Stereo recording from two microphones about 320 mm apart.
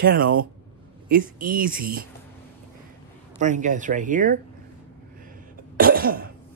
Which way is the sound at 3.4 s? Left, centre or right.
Right.